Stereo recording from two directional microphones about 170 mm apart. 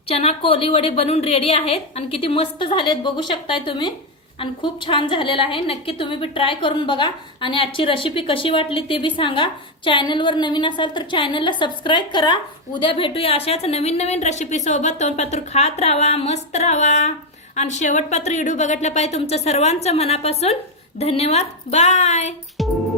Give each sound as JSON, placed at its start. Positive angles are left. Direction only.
{"t": 0.1, "sound": "a woman's voice", "side_deg": 35}